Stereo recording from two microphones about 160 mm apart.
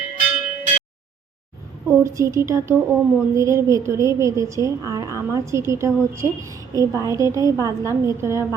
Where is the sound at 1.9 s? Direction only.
20° right (ahead or behind).